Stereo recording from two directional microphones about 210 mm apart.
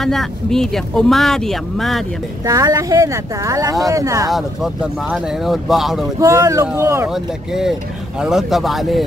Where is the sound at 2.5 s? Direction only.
15° right (ahead or behind).